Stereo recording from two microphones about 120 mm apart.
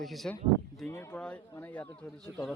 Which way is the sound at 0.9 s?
15° left (ahead or behind).